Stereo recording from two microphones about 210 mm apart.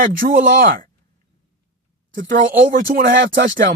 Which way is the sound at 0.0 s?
40° right (ahead or behind).